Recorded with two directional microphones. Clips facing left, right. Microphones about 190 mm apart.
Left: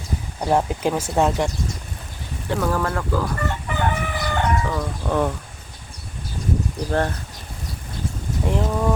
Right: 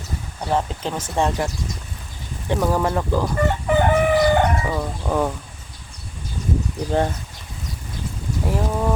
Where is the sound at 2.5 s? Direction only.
15° right (ahead or behind).